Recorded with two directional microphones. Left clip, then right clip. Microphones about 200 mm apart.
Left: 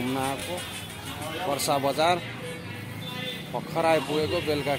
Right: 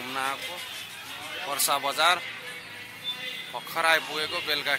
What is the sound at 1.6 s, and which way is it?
Speech, 25° right (ahead or behind).